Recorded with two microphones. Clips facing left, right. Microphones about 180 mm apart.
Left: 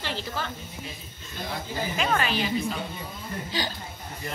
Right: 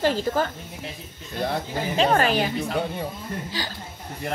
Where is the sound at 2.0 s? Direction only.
40° right (ahead or behind).